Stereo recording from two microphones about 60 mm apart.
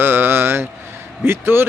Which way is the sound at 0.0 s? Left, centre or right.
Right.